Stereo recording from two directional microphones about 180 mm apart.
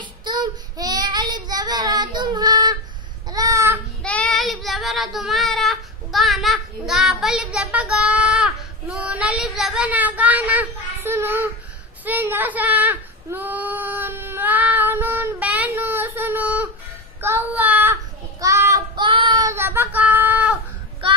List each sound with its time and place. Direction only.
0.0 s child singing: 25° right (ahead or behind)
3.3 s babbling: 20° right (ahead or behind)
4.0 s child singing: 5° left (ahead or behind); by 11.4 s 15° right (ahead or behind)
12.0 s a sound: 10° right (ahead or behind)
17.2 s child singing: 15° right (ahead or behind)